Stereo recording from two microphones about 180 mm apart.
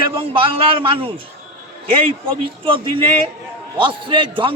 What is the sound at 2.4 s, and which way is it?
A man's voice, 30° right (ahead or behind).